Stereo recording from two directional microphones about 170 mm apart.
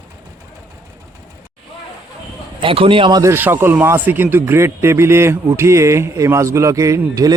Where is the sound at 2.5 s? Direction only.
30° right (ahead or behind).